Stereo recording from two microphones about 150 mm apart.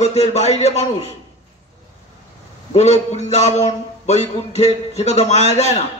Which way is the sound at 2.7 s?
45° left (ahead or behind).